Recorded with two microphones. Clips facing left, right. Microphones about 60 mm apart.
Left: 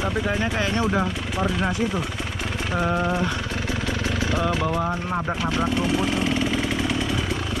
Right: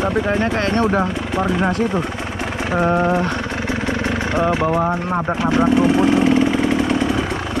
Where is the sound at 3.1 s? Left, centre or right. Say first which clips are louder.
Right 6 dB; right.